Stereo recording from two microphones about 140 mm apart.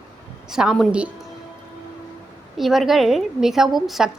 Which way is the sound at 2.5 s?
Centre (ahead or behind).